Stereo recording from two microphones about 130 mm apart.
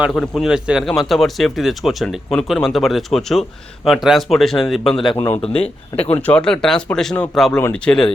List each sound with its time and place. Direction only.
0.1 s speech: centre (ahead or behind)
5.3 s speech: 50° left (ahead or behind)
6.0 s speech: 10° left (ahead or behind)